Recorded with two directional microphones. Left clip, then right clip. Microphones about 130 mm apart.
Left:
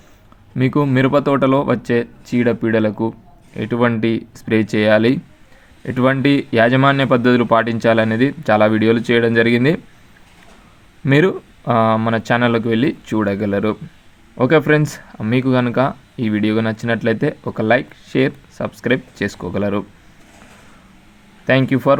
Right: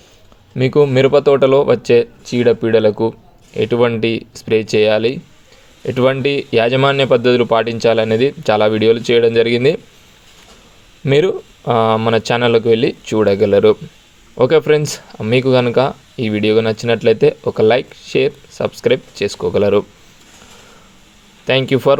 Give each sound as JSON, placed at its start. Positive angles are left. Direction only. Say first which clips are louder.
{"t": 0.5, "sound": "speech", "louder": "right 5 dB", "side_deg": -20}
{"t": 11.0, "sound": "speech", "louder": "right 2 dB", "side_deg": -20}
{"t": 21.4, "sound": "speech", "louder": "right 2 dB", "side_deg": -35}